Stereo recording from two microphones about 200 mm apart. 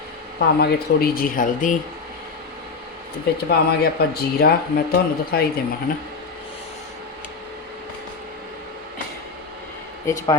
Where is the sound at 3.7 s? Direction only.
50° left (ahead or behind).